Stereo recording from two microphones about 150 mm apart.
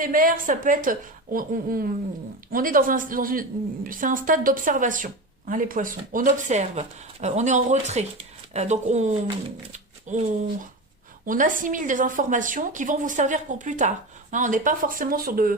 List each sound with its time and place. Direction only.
0.0 s a woman's voice: 70° right (ahead or behind)